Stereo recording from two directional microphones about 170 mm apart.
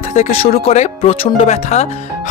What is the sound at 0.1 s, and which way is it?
Speech, 40° left (ahead or behind).